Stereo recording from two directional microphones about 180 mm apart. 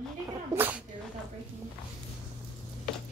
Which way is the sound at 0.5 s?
10° right (ahead or behind).